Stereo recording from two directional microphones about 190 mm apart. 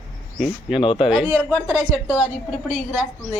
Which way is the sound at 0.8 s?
25° left (ahead or behind).